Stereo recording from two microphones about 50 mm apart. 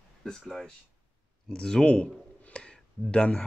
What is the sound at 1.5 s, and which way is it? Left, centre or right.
Speech, centre.